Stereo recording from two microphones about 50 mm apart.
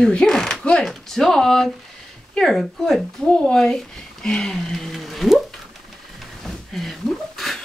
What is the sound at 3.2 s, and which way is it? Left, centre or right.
Speech, centre.